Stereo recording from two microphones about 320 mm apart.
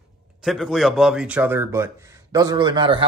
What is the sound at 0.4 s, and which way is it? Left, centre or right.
Speech, centre.